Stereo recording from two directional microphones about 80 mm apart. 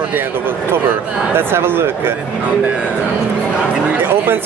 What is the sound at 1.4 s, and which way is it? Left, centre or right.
Speech, right.